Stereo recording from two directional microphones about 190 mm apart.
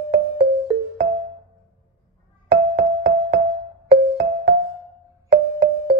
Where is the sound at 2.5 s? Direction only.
70° right (ahead or behind).